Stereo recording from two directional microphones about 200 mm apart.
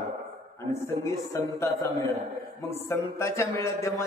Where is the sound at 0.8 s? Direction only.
15° left (ahead or behind).